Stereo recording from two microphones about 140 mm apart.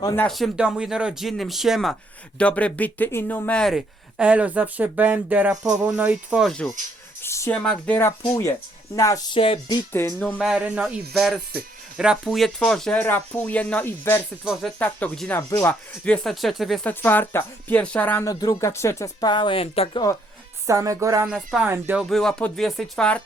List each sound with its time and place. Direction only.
0.3 s speech: centre (ahead or behind)
5.8 s music: 10° right (ahead or behind)
7.2 s a sound: 20° left (ahead or behind)
7.5 s speech: 5° left (ahead or behind); by 9.6 s 40° left (ahead or behind)
9.9 s speech: 15° left (ahead or behind)
10.2 s speech: centre (ahead or behind)
15.4 s speech: 25° left (ahead or behind)
15.6 s speech: 5° left (ahead or behind)
16.8 s speech: 15° left (ahead or behind)
18.3 s speech: 25° left (ahead or behind); by 20.0 s 45° left (ahead or behind)
20.7 s speech: 25° right (ahead or behind)
21.2 s speech: 5° right (ahead or behind)
21.7 s music: 15° right (ahead or behind)
22.1 s speech: 5° left (ahead or behind)